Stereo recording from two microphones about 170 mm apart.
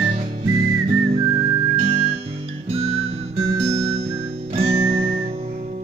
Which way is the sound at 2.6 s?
35° right (ahead or behind).